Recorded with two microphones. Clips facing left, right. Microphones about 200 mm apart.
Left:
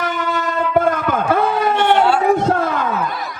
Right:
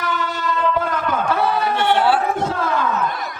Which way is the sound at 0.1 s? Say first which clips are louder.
Left 2 dB; 50° left (ahead or behind).